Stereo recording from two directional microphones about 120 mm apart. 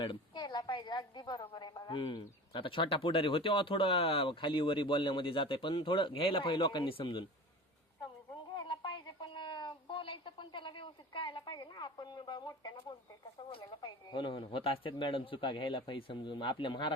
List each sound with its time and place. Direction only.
0.0 s a woman's voice: 40° left (ahead or behind)
8.5 s a sound: 45° left (ahead or behind)
13.5 s a woman's voice: 40° left (ahead or behind)